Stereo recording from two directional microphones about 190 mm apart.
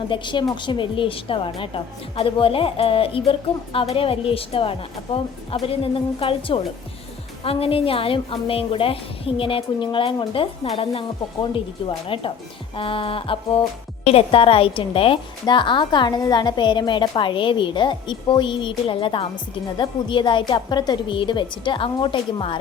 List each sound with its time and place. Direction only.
0.1 s a woman's voice: 25° left (ahead or behind)